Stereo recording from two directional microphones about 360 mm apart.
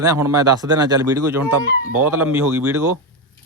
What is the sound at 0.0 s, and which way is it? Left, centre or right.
Speech, centre.